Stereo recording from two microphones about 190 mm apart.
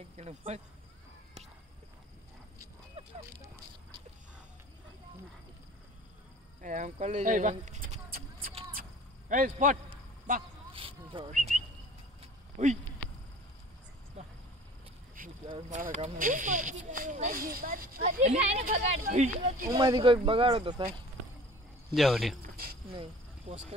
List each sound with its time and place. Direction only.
0.2 s speech: 35° right (ahead or behind)
6.6 s a sound: 40° right (ahead or behind)
9.3 s speech: 45° right (ahead or behind)
10.7 s a sound: 30° right (ahead or behind)
11.3 s bird: 45° right (ahead or behind)
12.6 s speech: 40° right (ahead or behind)
15.2 s a sound: 45° right (ahead or behind)
15.7 s speech: 40° right (ahead or behind)
18.2 s speech: 35° right (ahead or behind)
19.7 s speech: 25° right (ahead or behind)
21.9 s speech: centre (ahead or behind)